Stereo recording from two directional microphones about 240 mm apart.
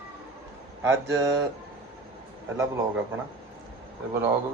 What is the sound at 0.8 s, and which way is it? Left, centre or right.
Speech, centre.